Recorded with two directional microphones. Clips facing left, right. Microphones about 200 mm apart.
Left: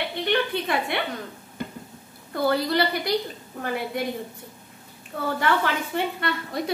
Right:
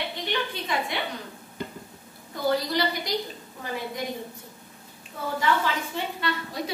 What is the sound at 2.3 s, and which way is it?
Speech, 60° left (ahead or behind).